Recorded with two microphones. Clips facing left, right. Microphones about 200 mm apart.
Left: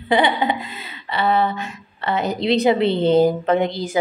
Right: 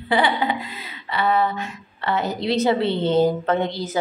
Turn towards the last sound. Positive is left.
turn(degrees=15)  # may be behind; listen again after turning